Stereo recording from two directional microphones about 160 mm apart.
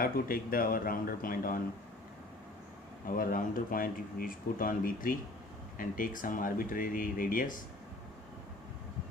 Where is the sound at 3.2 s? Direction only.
60° left (ahead or behind).